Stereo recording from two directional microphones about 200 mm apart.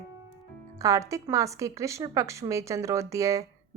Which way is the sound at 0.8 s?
15° right (ahead or behind).